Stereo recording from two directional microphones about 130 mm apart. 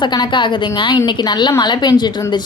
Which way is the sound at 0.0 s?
35° left (ahead or behind).